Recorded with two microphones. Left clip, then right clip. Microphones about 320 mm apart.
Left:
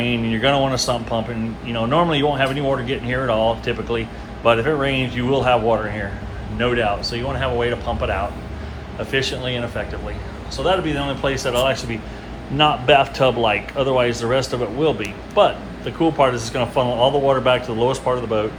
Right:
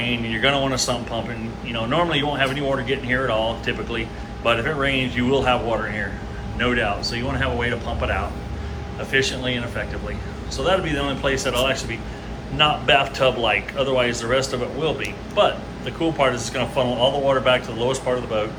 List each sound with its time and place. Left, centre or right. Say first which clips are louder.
0.0 s a man's voice: left 1 dB; centre